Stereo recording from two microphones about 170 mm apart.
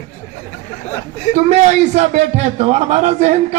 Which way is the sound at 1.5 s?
40° right (ahead or behind).